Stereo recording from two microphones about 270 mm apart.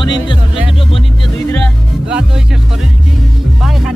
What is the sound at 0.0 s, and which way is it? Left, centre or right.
Speech, centre.